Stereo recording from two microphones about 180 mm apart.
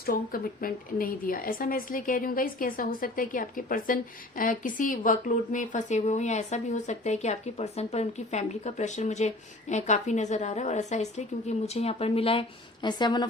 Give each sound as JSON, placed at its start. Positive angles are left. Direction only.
{"t": 0.0, "sound": "speech", "side_deg": 55}